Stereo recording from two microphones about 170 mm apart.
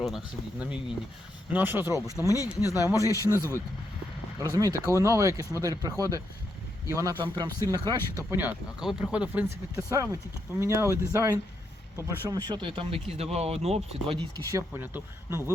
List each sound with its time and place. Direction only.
1.5 s speech: 10° right (ahead or behind)
2.1 s speech: 20° left (ahead or behind)
3.1 s speech: 20° right (ahead or behind)
8.4 s speech: 5° right (ahead or behind)
12.3 s speech: 25° right (ahead or behind)
14.3 s speech: 15° right (ahead or behind)